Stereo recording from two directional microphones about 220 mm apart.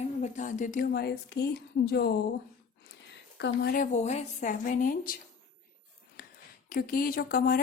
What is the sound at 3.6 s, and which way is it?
Speech, 35° left (ahead or behind).